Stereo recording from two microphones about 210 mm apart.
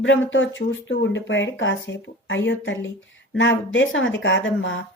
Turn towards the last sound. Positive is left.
turn(degrees=60)  # may be behind; listen again after turning